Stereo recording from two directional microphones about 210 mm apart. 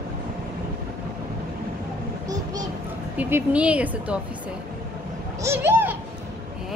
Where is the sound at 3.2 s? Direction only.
10° right (ahead or behind).